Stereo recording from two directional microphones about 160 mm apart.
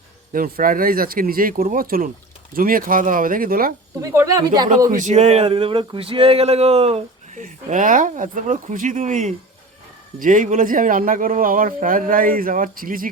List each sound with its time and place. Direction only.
0.3 s speech: 65° right (ahead or behind)
4.0 s speech: 20° right (ahead or behind)
4.9 s speech: 50° right (ahead or behind)